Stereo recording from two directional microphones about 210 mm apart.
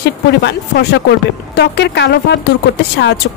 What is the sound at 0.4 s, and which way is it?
A woman's voice, 55° left (ahead or behind).